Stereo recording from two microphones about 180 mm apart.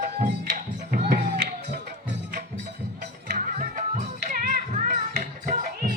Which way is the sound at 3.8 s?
45° right (ahead or behind).